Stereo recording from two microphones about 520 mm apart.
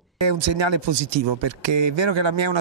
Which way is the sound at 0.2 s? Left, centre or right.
Right.